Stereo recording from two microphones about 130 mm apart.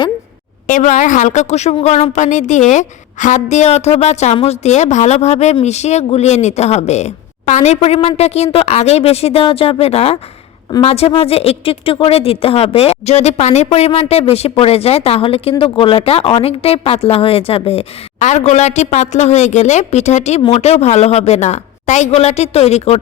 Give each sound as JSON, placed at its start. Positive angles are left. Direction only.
{"t": 0.7, "sound": "a woman's voice", "side_deg": 70}
{"t": 18.2, "sound": "a woman's voice", "side_deg": 60}